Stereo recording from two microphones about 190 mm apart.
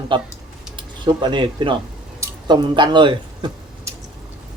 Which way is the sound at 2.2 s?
20° right (ahead or behind).